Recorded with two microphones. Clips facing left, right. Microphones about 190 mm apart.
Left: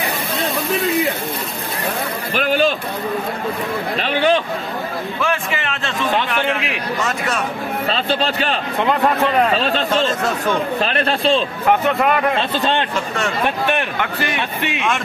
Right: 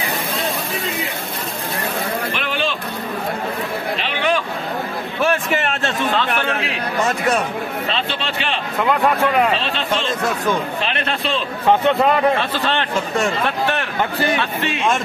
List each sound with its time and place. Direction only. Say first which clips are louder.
2.3 s a sound: left 6 dB; 40° left (ahead or behind)
4.0 s speech: left 5 dB; 45° left (ahead or behind)
5.2 s a man's voice: right 5 dB; 45° right (ahead or behind)
7.9 s speech: left 4 dB; 40° left (ahead or behind)
9.6 s speech: left 4 dB; 40° left (ahead or behind)
12.4 s a man's voice: left 2 dB; 20° left (ahead or behind)
14.4 s a man's voice: right 1 dB; 15° left (ahead or behind)